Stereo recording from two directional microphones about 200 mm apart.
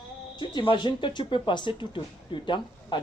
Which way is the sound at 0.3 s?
25° left (ahead or behind).